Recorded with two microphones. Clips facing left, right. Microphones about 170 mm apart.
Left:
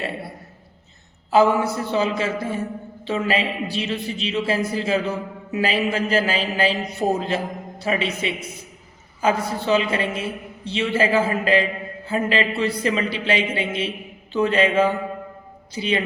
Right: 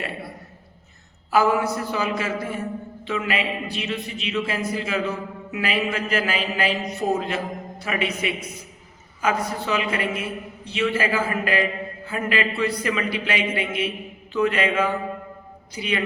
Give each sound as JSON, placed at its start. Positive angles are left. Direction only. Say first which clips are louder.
{"t": 1.3, "sound": "a man's voice", "louder": "left 3 dB", "side_deg": 25}